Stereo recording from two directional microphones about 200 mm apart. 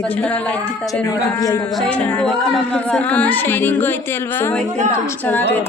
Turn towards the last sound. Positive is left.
turn(degrees=10)  # may be behind; listen again after turning